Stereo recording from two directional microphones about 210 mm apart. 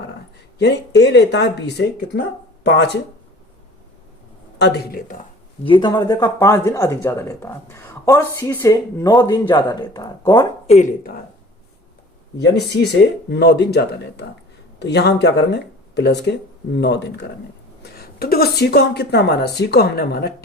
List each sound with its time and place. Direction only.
0.6 s speech: 50° left (ahead or behind)
4.5 s speech: 55° left (ahead or behind)
5.6 s speech: 20° left (ahead or behind)
10.8 s speech: 40° left (ahead or behind)
12.4 s speech: 50° left (ahead or behind)